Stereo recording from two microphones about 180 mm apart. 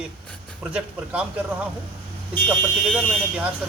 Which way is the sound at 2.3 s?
25° right (ahead or behind).